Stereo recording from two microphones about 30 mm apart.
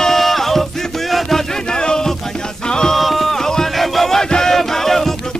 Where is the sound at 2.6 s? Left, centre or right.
Left.